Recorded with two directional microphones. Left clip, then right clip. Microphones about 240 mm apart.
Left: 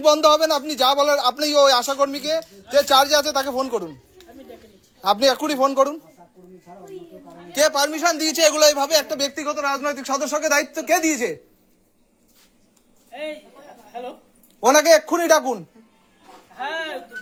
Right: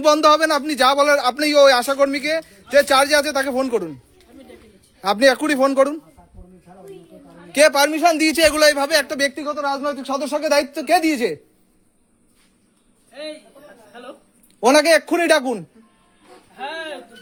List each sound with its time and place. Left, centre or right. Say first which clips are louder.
0.0 s speech: right 1 dB; right
4.9 s speech: right 2 dB; right
7.5 s speech: right 5 dB; right
9.4 s speech: right 1 dB; centre
10.2 s speech: right 3 dB; right
14.6 s speech: even; right